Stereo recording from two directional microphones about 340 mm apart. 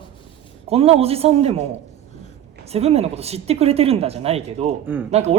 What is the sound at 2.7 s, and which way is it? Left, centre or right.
Speech, centre.